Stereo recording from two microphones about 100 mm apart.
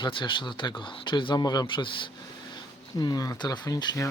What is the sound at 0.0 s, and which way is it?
Speech, 55° left (ahead or behind).